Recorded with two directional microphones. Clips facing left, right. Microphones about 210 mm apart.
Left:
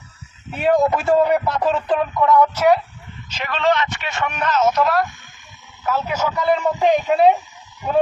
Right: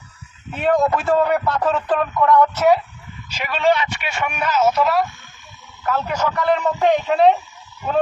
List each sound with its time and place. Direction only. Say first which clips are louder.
0.5 s speech: left 1 dB; 5° left (ahead or behind)
1.0 s speech: left 2 dB; 20° left (ahead or behind)
1.7 s a man's voice: even; 10° left (ahead or behind)
6.0 s speech: right 1 dB; 5° left (ahead or behind)
7.1 s speech: even; centre (ahead or behind)
7.3 s dog: left 1 dB; 15° left (ahead or behind)